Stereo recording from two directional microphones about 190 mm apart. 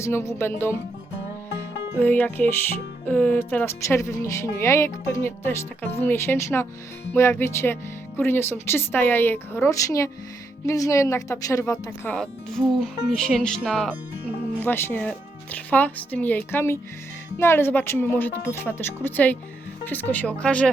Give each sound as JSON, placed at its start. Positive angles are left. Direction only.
{"t": 0.0, "sound": "speech", "side_deg": 15}
{"t": 2.0, "sound": "speech", "side_deg": 10}